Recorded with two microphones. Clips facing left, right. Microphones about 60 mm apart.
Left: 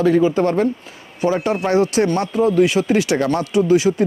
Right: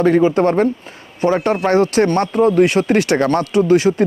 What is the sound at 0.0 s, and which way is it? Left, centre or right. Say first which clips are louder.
Speech: right 2 dB; right.